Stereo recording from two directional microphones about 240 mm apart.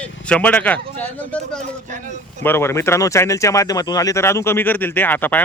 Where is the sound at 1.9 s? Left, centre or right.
Right.